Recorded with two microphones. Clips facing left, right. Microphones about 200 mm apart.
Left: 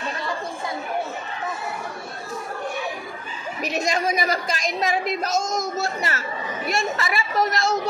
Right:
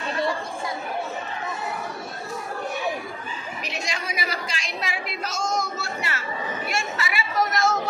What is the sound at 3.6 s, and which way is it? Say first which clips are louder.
A woman's voice: left 10 dB; 45° left (ahead or behind).